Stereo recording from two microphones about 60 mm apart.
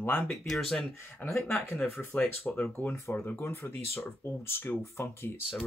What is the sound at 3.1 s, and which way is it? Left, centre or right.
Speech, left.